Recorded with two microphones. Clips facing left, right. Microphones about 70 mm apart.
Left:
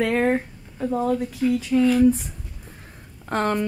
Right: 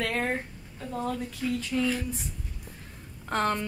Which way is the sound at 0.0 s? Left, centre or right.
Left.